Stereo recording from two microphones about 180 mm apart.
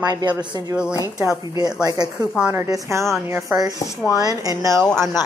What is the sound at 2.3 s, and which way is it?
A woman's voice, 10° right (ahead or behind).